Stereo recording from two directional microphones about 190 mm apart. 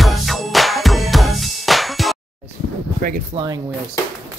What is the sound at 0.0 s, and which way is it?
Music, centre (ahead or behind).